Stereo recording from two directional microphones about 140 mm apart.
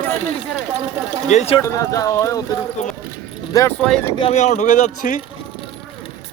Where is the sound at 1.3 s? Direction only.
55° left (ahead or behind).